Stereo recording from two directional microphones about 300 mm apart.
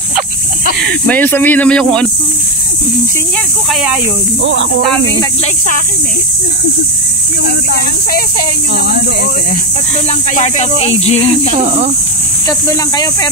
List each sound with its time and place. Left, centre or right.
0.8 s speech: centre
4.4 s speech: right
7.4 s speech: left
10.3 s speech: left
11.6 s speech: right
12.4 s speech: centre